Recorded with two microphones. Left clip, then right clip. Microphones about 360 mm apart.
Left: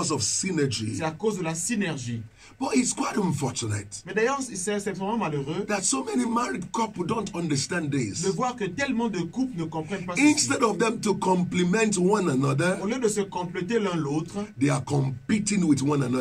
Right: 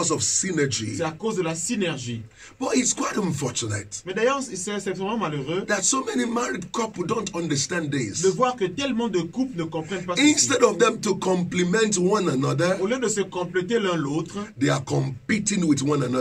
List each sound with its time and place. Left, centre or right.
0.0 s speech: centre
1.0 s a man's voice: centre
2.6 s speech: centre
4.1 s a man's voice: centre
5.7 s speech: centre
8.2 s a man's voice: centre
10.1 s speech: centre
12.8 s a man's voice: centre
14.6 s speech: centre